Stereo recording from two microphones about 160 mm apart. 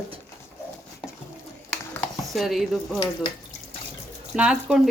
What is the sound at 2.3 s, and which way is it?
Speech, centre (ahead or behind).